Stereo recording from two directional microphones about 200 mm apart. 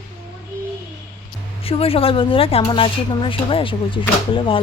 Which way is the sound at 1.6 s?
30° left (ahead or behind).